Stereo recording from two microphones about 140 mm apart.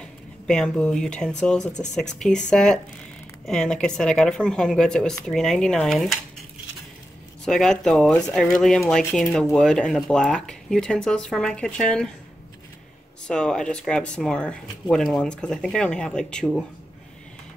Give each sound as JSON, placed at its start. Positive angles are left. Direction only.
{"t": 0.0, "sound": "speech", "side_deg": 5}
{"t": 7.4, "sound": "speech", "side_deg": 5}
{"t": 13.3, "sound": "speech", "side_deg": 5}